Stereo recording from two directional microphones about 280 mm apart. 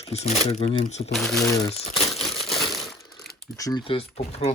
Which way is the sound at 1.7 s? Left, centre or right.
Left.